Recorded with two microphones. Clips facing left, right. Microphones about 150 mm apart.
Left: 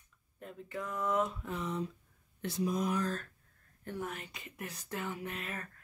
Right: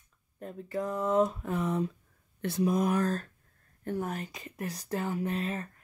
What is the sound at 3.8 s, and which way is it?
Speech, 40° right (ahead or behind).